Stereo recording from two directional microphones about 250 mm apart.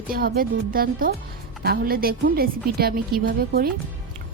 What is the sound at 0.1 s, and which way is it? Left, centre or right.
Speech, right.